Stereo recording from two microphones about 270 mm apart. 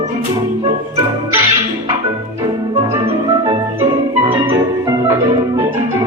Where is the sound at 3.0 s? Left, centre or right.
Right.